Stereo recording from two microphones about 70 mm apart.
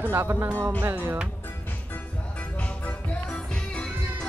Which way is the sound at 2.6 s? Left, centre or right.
Centre.